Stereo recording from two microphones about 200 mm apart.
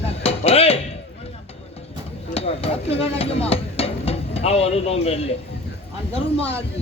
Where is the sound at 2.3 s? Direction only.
30° left (ahead or behind).